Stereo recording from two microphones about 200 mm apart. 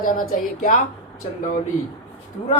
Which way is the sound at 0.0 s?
40° left (ahead or behind).